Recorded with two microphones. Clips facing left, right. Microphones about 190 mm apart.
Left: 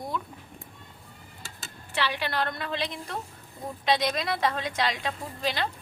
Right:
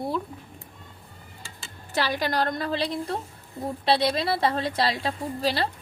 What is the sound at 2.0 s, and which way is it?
A woman's voice, 40° right (ahead or behind).